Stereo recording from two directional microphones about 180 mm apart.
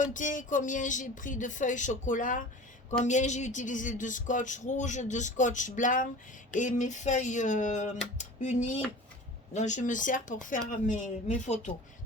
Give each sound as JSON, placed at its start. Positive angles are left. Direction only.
{"t": 0.0, "sound": "speech", "side_deg": 45}